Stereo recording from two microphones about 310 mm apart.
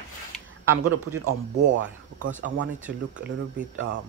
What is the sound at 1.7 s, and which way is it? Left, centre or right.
Speech, right.